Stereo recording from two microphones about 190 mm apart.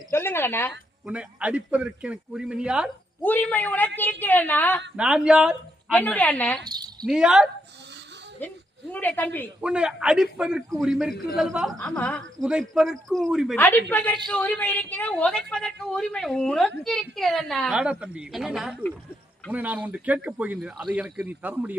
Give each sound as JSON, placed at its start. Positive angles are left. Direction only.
{"t": 0.1, "sound": "a woman's voice", "side_deg": 10}
{"t": 1.0, "sound": "a man's voice", "side_deg": -5}
{"t": 3.2, "sound": "a woman's voice", "side_deg": 10}
{"t": 4.9, "sound": "a man's voice", "side_deg": -5}
{"t": 5.9, "sound": "a woman's voice", "side_deg": 10}
{"t": 6.7, "sound": "speech", "side_deg": -20}
{"t": 7.0, "sound": "a man's voice", "side_deg": -5}
{"t": 8.4, "sound": "a woman's voice", "side_deg": 10}
{"t": 9.6, "sound": "a man's voice", "side_deg": -5}
{"t": 12.4, "sound": "a man's voice", "side_deg": -5}
{"t": 13.6, "sound": "a woman's voice", "side_deg": 10}